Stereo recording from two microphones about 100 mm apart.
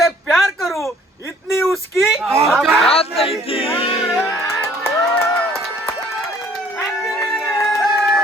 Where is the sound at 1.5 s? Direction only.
25° left (ahead or behind).